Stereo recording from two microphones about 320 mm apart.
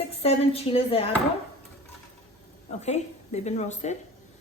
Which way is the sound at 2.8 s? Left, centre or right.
Left.